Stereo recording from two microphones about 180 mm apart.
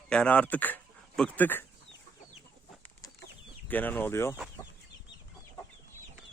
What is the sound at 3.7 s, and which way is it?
Speech, 10° left (ahead or behind).